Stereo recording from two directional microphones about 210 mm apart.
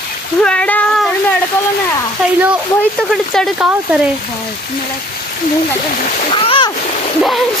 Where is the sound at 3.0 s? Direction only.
Centre (ahead or behind).